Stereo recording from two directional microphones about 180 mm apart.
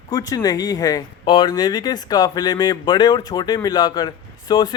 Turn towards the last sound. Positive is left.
turn(degrees=25)  # may be behind; listen again after turning